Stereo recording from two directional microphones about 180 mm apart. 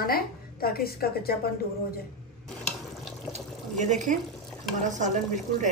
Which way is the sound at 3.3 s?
40° right (ahead or behind).